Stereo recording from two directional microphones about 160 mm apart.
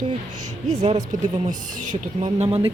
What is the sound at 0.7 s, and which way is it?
A woman's voice, 45° right (ahead or behind).